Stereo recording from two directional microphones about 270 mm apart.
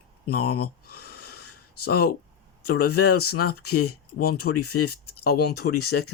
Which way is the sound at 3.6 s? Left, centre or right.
Left.